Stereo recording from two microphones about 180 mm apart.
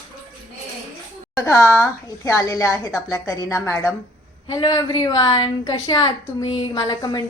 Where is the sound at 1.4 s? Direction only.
15° left (ahead or behind).